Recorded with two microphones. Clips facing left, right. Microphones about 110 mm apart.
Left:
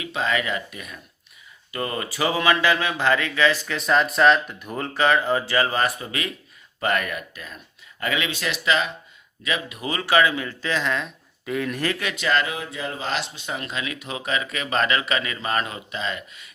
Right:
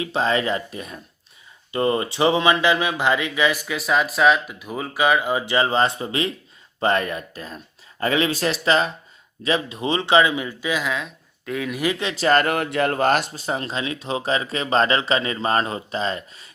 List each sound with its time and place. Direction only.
0.0 s speech: 30° right (ahead or behind); by 11.8 s centre (ahead or behind)
11.8 s speech: 20° right (ahead or behind)